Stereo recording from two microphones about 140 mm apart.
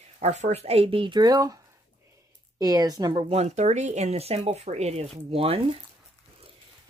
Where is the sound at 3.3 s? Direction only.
50° right (ahead or behind).